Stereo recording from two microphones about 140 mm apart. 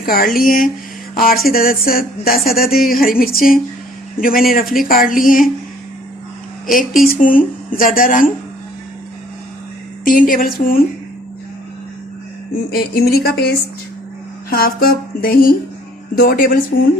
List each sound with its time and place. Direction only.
0.0 s speech: 90° left
7.1 s speech: 85° left
10.0 s speech: 80° left
12.7 s speech: 90° left
14.5 s speech: 90° left